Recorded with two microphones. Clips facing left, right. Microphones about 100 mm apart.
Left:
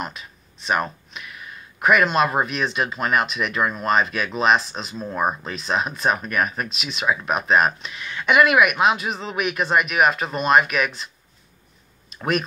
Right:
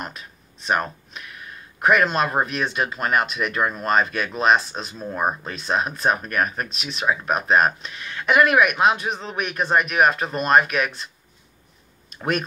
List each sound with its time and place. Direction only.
0.2 s a sound: centre (ahead or behind)
1.8 s speech: centre (ahead or behind)
6.2 s speech: 40° right (ahead or behind)
6.7 s speech: centre (ahead or behind)
9.6 s speech: 35° right (ahead or behind)
9.9 s speech: centre (ahead or behind)
12.1 s a sound: centre (ahead or behind)